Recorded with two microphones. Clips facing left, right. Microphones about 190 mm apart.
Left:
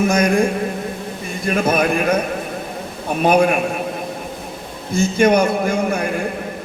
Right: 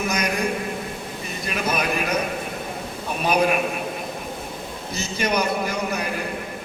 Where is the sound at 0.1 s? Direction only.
50° left (ahead or behind).